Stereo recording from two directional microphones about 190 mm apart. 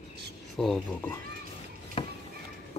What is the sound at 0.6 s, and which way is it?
Speech, 5° left (ahead or behind).